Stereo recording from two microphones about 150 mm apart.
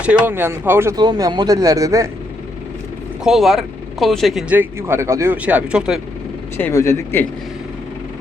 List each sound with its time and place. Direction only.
0.0 s speech: 10° right (ahead or behind)
0.9 s speech: 25° right (ahead or behind)
3.2 s speech: centre (ahead or behind)
4.5 s speech: 15° right (ahead or behind)
6.6 s speech: 15° left (ahead or behind)